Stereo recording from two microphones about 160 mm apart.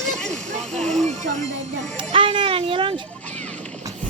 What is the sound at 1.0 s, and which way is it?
Speech, 50° right (ahead or behind).